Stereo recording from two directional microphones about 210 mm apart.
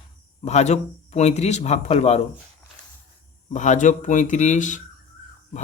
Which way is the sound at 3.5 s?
35° left (ahead or behind).